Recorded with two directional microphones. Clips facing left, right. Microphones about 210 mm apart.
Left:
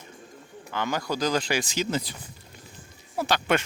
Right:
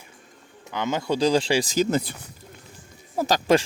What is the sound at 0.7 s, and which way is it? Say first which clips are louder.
Speech: right 4 dB; 20° right (ahead or behind).